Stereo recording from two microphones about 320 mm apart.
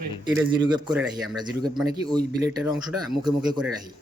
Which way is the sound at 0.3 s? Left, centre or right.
Centre.